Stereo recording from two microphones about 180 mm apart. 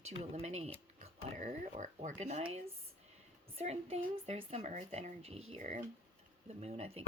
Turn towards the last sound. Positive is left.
turn(degrees=-35)  # may be behind; listen again after turning